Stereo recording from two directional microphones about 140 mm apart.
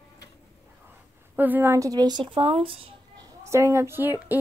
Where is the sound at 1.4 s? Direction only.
15° right (ahead or behind); by 3.2 s 40° right (ahead or behind).